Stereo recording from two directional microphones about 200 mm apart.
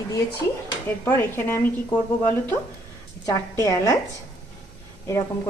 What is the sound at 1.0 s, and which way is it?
Speech, 15° left (ahead or behind).